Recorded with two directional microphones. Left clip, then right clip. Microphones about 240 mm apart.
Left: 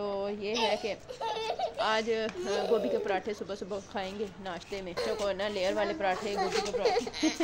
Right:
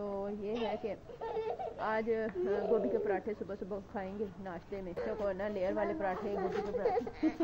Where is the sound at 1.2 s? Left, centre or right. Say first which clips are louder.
Left 4 dB; left.